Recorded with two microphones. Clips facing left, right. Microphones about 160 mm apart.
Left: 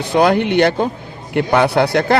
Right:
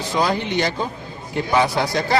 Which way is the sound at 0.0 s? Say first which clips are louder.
Left 7 dB; 60° left (ahead or behind).